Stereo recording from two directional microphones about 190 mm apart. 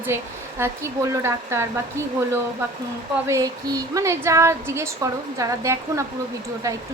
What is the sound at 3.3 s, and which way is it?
A woman's voice, 15° right (ahead or behind).